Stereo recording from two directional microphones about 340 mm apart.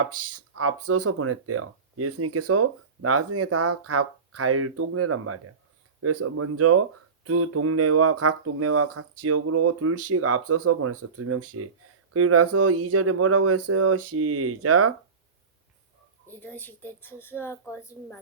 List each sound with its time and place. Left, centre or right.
0.0 s speech: right
16.3 s a woman's voice: centre